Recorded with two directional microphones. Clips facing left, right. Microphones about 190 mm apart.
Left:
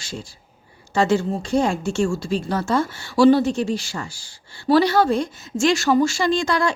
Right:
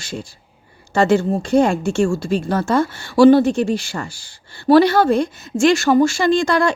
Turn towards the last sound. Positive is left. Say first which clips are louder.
# right 4 dB
turn(degrees=-55)  # may be behind; listen again after turning